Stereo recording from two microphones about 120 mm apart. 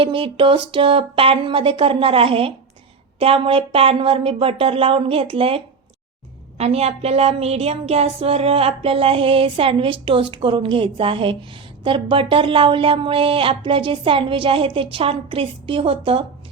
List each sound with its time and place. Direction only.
0.0 s a woman's voice: 45° right (ahead or behind)